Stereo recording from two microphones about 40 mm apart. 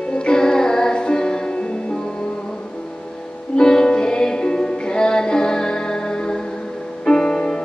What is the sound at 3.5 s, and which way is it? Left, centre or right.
Music, centre.